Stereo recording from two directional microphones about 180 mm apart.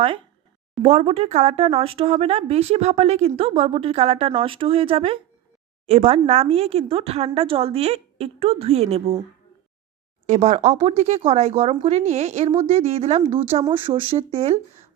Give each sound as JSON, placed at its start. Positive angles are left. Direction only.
{"t": 0.8, "sound": "speech", "side_deg": -35}
{"t": 10.2, "sound": "speech", "side_deg": -40}